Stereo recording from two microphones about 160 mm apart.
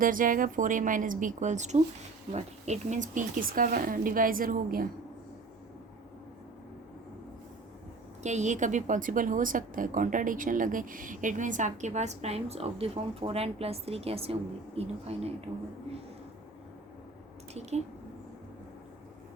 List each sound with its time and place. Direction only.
0.0 s speech: 60° right (ahead or behind)
8.2 s a woman's voice: 45° right (ahead or behind)
17.5 s a woman's voice: 45° right (ahead or behind)